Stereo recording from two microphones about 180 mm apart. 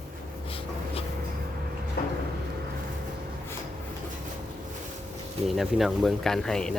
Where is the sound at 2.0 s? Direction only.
60° left (ahead or behind).